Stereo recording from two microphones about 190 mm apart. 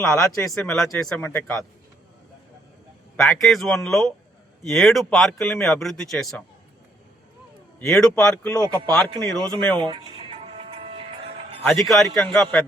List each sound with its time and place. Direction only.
0.0 s speech: 5° left (ahead or behind)
3.2 s speech: centre (ahead or behind)
7.8 s speech: 5° left (ahead or behind)
9.8 s music: 25° right (ahead or behind)
11.6 s speech: centre (ahead or behind)